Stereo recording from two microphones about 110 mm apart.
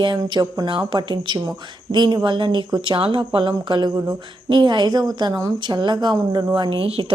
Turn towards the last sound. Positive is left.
turn(degrees=-60)  # may be behind; listen again after turning